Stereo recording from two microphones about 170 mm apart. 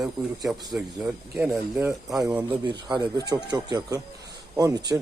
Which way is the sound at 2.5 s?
25° right (ahead or behind).